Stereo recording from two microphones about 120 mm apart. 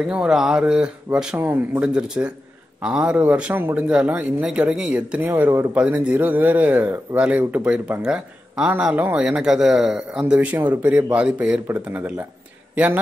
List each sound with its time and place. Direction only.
0.0 s a man's voice: 5° right (ahead or behind)
5.3 s speech: 20° right (ahead or behind)
5.8 s a man's voice: 10° right (ahead or behind)